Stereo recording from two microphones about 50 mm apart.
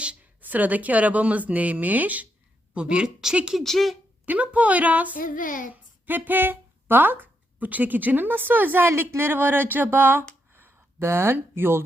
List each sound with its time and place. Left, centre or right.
0.4 s speech: right
2.7 s a woman's voice: right
3.6 s speech: centre
4.3 s speech: right
8.9 s speech: right
10.5 s a sound: right